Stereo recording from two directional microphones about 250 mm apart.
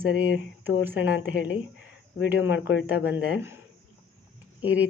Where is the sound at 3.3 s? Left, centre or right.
Centre.